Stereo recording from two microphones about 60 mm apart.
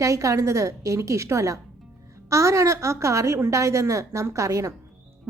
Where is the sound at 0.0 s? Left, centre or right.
Right.